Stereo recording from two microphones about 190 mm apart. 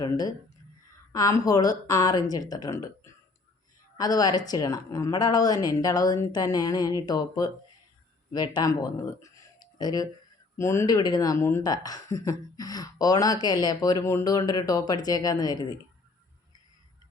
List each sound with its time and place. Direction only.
0.0 s a woman's voice: 20° left (ahead or behind)